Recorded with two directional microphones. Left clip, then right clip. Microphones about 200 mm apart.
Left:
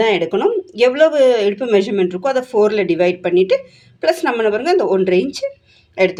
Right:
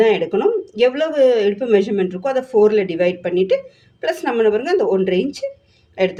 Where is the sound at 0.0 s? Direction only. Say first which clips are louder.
Even; 35° left (ahead or behind).